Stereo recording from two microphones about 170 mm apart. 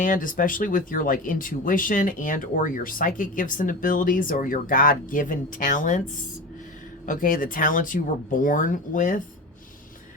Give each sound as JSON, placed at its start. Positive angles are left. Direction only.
{"t": 0.0, "sound": "speech", "side_deg": 55}
{"t": 7.0, "sound": "speech", "side_deg": 50}